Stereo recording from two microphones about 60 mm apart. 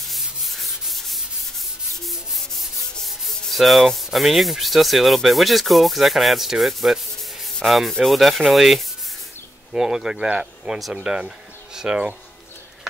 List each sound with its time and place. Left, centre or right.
0.0 s rub: centre
9.7 s speech: centre